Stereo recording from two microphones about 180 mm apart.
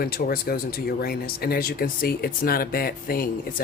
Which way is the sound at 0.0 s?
55° left (ahead or behind).